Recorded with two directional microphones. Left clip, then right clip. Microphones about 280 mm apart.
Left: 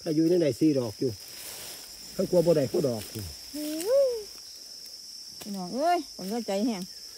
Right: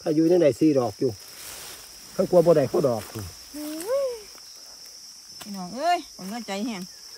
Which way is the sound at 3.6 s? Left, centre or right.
Right.